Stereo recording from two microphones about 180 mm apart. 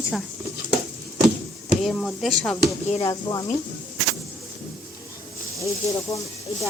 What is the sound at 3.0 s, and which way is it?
Speech, 20° left (ahead or behind).